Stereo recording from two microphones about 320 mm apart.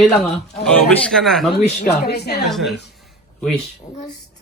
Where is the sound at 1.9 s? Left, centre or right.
Left.